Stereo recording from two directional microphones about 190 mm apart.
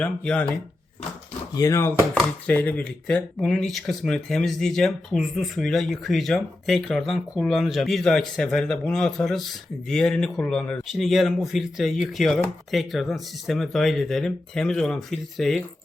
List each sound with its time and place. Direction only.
0.0 s speech: 5° left (ahead or behind)
1.5 s speech: 15° left (ahead or behind)